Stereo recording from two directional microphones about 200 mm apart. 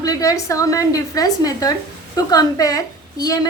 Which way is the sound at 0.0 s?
15° left (ahead or behind).